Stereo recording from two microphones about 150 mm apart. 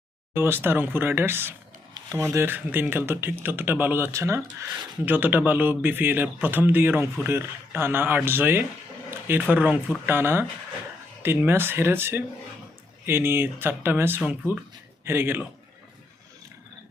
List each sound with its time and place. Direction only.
0.3 s speech: 15° right (ahead or behind)